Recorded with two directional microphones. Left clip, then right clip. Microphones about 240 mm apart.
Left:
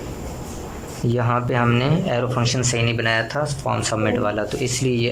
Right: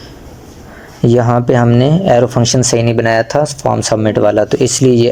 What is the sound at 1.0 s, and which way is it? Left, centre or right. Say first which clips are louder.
Speech: right 11 dB; right.